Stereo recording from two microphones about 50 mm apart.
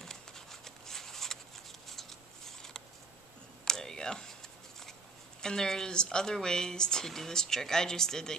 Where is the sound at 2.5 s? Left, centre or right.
Centre.